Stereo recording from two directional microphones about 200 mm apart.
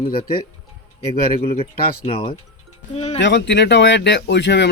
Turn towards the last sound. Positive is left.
turn(degrees=60)  # may be behind; listen again after turning